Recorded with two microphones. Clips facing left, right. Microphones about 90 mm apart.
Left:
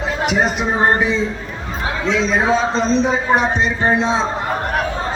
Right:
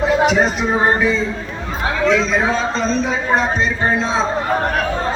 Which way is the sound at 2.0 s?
25° left (ahead or behind).